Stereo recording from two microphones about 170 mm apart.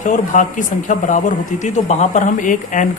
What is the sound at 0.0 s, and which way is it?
Speech, 50° left (ahead or behind).